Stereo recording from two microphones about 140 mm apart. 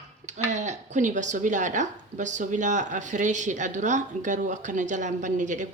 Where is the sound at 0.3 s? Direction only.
55° right (ahead or behind).